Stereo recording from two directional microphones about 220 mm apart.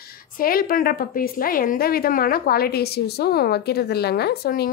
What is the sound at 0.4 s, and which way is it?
A woman's voice, 40° left (ahead or behind).